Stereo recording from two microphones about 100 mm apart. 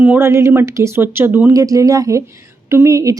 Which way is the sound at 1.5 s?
35° right (ahead or behind).